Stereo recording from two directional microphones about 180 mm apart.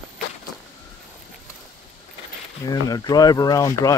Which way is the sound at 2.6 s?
20° left (ahead or behind).